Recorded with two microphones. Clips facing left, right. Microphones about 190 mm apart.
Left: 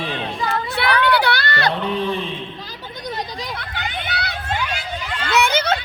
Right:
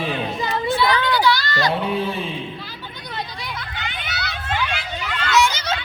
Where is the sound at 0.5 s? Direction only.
65° left (ahead or behind).